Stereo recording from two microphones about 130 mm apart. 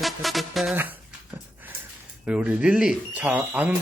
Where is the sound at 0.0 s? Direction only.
Centre (ahead or behind).